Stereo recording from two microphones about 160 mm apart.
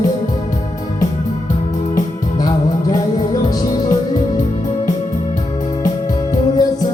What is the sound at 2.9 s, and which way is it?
Music, 25° left (ahead or behind).